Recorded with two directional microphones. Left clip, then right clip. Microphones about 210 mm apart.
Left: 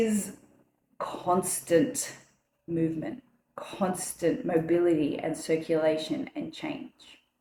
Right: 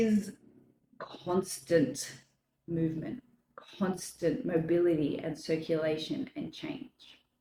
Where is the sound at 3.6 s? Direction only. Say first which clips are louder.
Left 5 dB; 30° right (ahead or behind).